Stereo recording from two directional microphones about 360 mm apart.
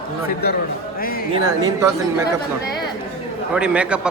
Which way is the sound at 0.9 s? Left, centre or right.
Left.